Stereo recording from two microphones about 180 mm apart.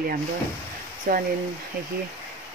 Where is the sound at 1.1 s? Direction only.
55° right (ahead or behind).